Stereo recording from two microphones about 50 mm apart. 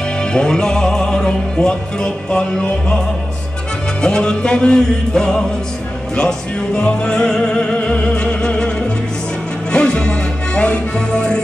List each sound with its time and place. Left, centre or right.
0.2 s music: centre
4.0 s music: centre